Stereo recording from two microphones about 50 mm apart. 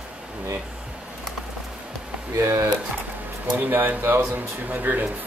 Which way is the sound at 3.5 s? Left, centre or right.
Right.